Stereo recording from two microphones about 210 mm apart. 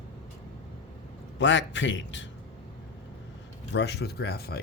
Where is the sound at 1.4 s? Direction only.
60° left (ahead or behind).